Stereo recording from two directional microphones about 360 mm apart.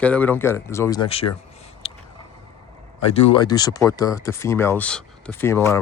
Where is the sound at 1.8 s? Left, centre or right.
Centre.